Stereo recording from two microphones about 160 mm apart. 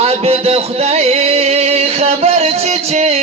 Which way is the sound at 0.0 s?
40° right (ahead or behind).